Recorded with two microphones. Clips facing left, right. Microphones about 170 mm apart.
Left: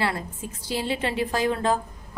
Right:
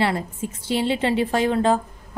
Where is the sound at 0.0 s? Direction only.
25° right (ahead or behind).